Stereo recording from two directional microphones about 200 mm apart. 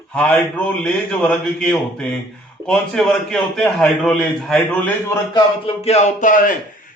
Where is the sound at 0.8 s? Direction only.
5° left (ahead or behind).